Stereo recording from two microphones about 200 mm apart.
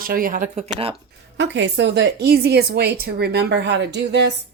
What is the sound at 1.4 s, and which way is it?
A woman's voice, 65° right (ahead or behind).